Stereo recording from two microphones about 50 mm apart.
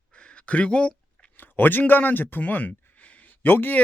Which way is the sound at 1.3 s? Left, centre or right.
Left.